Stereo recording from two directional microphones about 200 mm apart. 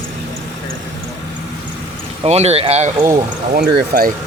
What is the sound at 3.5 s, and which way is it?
Speech, 45° right (ahead or behind).